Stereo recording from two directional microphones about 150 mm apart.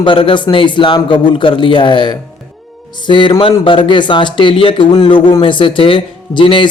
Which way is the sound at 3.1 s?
35° left (ahead or behind).